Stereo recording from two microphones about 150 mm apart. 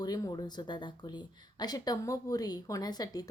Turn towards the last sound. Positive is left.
turn(degrees=25)  # may be behind; listen again after turning